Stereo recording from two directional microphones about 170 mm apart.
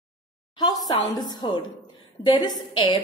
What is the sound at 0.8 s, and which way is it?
A woman's voice, 25° left (ahead or behind).